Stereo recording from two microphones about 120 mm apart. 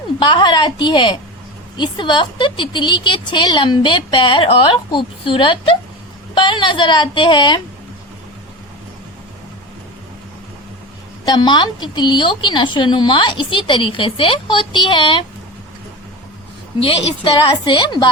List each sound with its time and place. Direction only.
0.2 s a woman's voice: 40° left (ahead or behind)
11.3 s a woman's voice: 40° left (ahead or behind)
16.8 s a woman's voice: 50° left (ahead or behind)
17.7 s a woman's voice: 40° left (ahead or behind)